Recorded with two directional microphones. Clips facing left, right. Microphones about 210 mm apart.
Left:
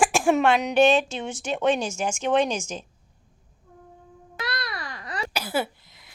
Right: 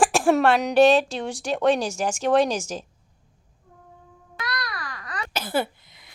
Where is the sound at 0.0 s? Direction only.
Centre (ahead or behind).